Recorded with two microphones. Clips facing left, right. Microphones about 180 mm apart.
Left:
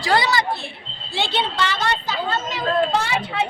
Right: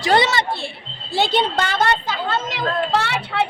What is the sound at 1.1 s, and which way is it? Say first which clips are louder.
A woman's voice: right 5 dB; 40° right (ahead or behind).